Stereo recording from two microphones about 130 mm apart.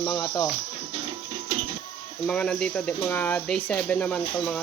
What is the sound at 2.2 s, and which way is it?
Speech, 5° left (ahead or behind).